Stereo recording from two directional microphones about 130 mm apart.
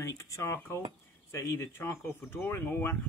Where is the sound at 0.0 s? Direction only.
25° left (ahead or behind).